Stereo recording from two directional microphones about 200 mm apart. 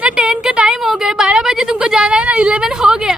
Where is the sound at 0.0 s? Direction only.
5° right (ahead or behind).